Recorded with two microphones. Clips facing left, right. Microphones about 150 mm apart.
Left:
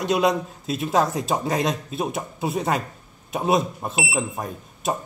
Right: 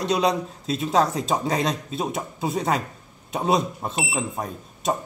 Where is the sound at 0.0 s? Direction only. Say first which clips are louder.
Left 1 dB; centre (ahead or behind).